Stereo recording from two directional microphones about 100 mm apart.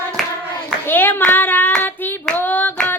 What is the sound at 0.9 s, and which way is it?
Hands, 20° left (ahead or behind).